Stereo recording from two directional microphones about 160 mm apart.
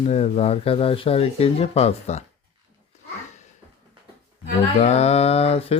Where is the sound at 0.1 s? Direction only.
45° left (ahead or behind).